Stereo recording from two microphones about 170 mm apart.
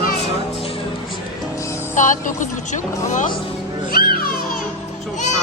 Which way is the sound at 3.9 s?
60° left (ahead or behind).